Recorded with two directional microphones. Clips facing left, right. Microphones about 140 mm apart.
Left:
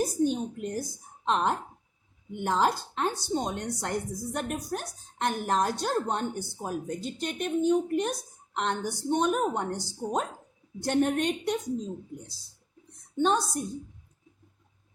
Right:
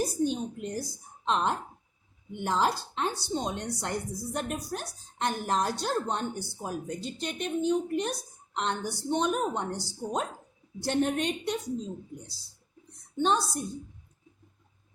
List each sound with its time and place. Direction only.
0.0 s a woman's voice: 50° left (ahead or behind)
13.2 s a woman's voice: 50° left (ahead or behind)